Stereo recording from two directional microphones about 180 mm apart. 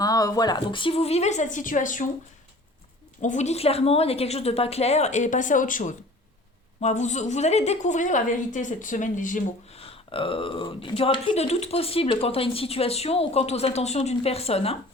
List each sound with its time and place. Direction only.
0.0 s speech: 20° left (ahead or behind); by 2.0 s 45° left (ahead or behind)
3.2 s speech: 40° left (ahead or behind)
9.7 s speech: 30° left (ahead or behind)